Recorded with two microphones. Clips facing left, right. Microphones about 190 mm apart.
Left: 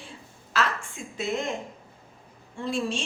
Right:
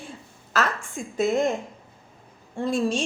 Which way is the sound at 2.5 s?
45° right (ahead or behind).